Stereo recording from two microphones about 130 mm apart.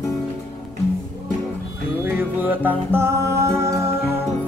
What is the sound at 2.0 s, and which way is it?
Music, 15° right (ahead or behind).